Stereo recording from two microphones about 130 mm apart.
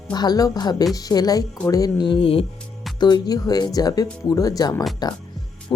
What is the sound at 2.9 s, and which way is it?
Speech, 35° left (ahead or behind).